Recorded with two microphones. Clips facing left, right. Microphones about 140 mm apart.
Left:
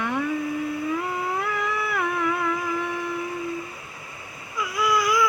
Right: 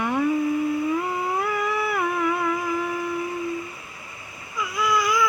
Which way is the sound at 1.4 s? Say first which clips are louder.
Right 2 dB; 5° right (ahead or behind).